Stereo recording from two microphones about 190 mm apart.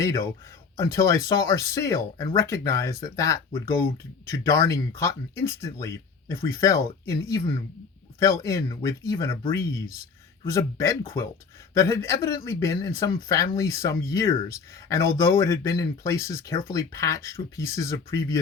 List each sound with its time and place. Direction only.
0.0 s speech: 15° left (ahead or behind)